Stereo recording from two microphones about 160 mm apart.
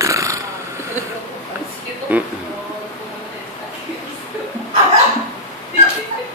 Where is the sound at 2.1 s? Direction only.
10° right (ahead or behind).